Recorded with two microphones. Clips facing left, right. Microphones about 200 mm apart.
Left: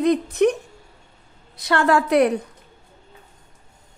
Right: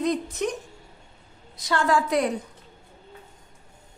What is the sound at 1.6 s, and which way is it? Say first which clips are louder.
Speech: left 4 dB; 65° left (ahead or behind).